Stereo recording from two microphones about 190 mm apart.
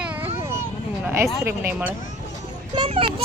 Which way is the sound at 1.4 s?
10° right (ahead or behind).